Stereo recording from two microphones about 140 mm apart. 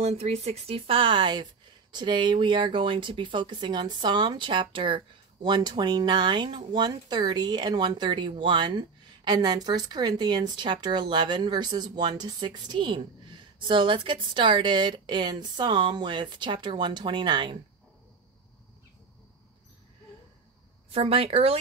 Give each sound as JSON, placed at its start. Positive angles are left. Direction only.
{"t": 0.0, "sound": "speech", "side_deg": -50}
{"t": 20.9, "sound": "speech", "side_deg": -45}